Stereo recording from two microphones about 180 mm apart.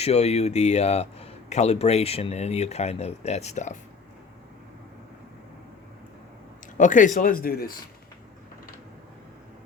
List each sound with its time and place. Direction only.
0.0 s a man's voice: 35° left (ahead or behind)
6.7 s speech: 45° left (ahead or behind)